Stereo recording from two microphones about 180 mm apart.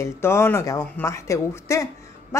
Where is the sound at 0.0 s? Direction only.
15° left (ahead or behind).